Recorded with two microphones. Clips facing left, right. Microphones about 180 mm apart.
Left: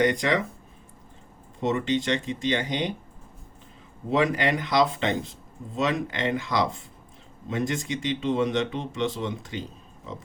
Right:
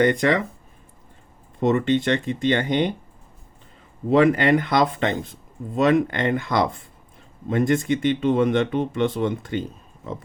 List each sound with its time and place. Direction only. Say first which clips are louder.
0.0 s speech: right 4 dB; 55° right (ahead or behind)
1.6 s speech: right 5 dB; 55° right (ahead or behind)
4.1 s speech: right 7 dB; 60° right (ahead or behind)